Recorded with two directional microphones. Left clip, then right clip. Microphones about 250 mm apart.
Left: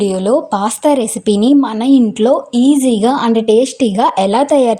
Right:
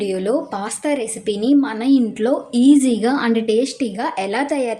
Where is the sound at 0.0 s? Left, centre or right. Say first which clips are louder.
Left 7 dB; left.